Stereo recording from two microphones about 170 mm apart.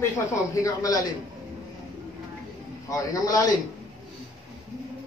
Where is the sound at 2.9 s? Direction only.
20° left (ahead or behind).